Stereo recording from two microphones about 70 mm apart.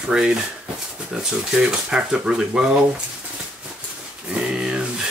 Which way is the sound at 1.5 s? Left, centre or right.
Centre.